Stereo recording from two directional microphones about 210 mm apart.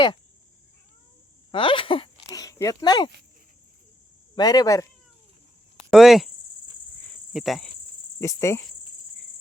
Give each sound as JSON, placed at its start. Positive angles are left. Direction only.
{"t": 1.5, "sound": "a sound", "side_deg": 25}
{"t": 2.2, "sound": "speech", "side_deg": 15}
{"t": 4.4, "sound": "speech", "side_deg": 20}
{"t": 5.9, "sound": "speech", "side_deg": 0}
{"t": 7.0, "sound": "cricket", "side_deg": 0}
{"t": 8.2, "sound": "speech", "side_deg": 15}